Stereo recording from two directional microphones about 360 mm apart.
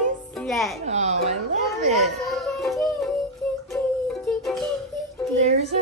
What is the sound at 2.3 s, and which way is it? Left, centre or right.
Child singing, centre.